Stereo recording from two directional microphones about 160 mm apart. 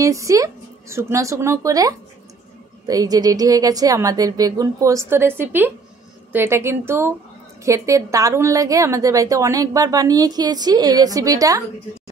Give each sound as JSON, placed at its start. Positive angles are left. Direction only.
{"t": 0.0, "sound": "a woman's voice", "side_deg": -20}